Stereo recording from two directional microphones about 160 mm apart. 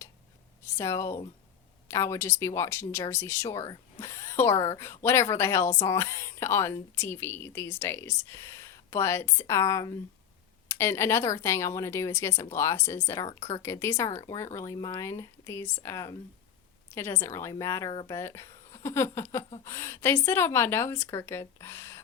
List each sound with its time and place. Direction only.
0.6 s a woman's voice: 15° left (ahead or behind)